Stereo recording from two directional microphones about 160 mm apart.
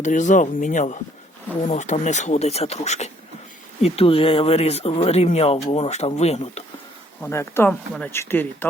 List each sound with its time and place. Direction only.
0.0 s speech: 50° left (ahead or behind)
7.2 s speech: 15° left (ahead or behind)